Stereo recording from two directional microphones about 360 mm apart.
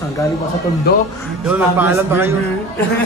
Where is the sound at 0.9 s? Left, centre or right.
Left.